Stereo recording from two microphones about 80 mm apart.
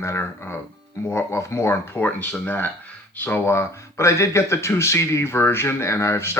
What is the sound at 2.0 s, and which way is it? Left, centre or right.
Speech, left.